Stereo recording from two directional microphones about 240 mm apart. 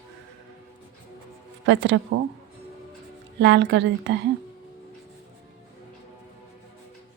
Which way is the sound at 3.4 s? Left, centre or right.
Right.